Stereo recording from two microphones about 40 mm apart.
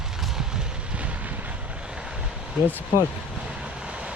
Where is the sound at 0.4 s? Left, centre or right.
Centre; by 1.8 s right.